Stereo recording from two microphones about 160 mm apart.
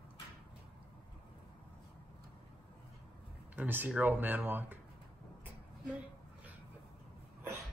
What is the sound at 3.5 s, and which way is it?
Speech, 10° right (ahead or behind).